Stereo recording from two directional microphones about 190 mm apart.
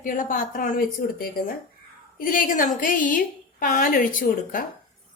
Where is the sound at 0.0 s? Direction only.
45° left (ahead or behind).